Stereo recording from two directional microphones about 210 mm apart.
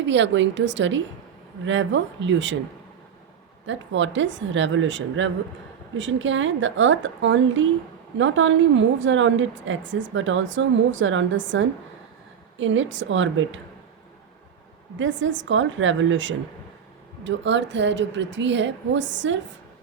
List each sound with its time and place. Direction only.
0.0 s a woman's voice: 60° right (ahead or behind)
3.7 s a woman's voice: 60° right (ahead or behind)
14.9 s a woman's voice: 65° right (ahead or behind)